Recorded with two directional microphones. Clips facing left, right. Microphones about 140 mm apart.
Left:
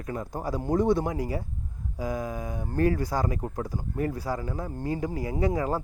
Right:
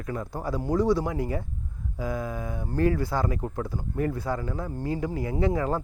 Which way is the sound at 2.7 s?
45° left (ahead or behind).